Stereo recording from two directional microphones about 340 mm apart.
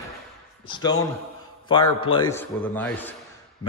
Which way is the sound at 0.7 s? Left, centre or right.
Centre.